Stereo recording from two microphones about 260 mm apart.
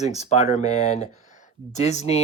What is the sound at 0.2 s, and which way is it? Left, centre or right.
Speech, left.